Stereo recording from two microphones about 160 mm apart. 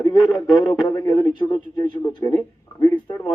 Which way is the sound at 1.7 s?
20° left (ahead or behind).